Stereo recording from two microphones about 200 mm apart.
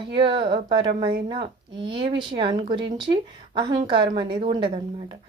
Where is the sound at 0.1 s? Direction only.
25° right (ahead or behind).